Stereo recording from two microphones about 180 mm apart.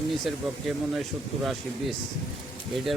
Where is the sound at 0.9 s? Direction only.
Centre (ahead or behind).